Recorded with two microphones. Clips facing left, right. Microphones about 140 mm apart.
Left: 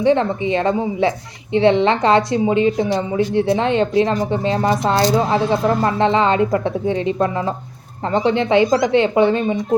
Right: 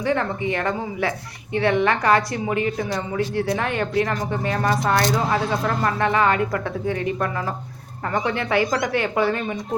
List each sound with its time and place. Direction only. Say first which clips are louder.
0.0 s a woman's voice: left 7 dB; 25° left (ahead or behind)